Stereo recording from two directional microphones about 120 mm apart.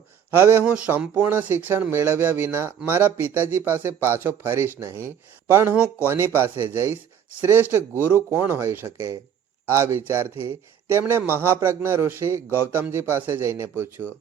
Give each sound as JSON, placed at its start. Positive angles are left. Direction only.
{"t": 0.3, "sound": "a man's voice", "side_deg": -15}